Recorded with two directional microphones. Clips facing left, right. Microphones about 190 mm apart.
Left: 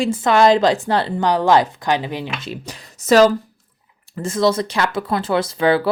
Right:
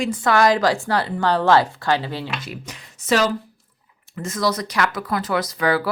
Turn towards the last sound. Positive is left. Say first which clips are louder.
# left 4 dB
turn(degrees=25)  # may be behind; listen again after turning